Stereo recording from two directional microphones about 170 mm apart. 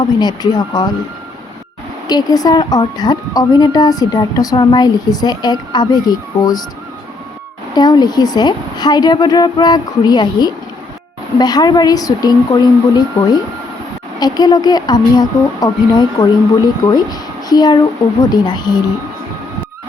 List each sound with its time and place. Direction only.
0.2 s a woman's voice: 25° left (ahead or behind)
2.0 s a woman's voice: 25° left (ahead or behind)
7.8 s a woman's voice: 25° left (ahead or behind)